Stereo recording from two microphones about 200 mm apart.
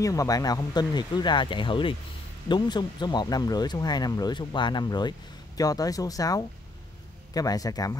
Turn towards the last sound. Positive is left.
turn(degrees=15)  # may be behind; listen again after turning